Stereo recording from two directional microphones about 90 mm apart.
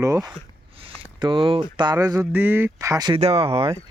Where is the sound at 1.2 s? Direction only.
65° right (ahead or behind).